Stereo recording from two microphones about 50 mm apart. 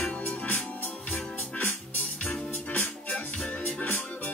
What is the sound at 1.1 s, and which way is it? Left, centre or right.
Music, left.